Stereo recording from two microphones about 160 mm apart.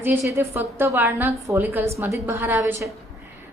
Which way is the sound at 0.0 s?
15° right (ahead or behind).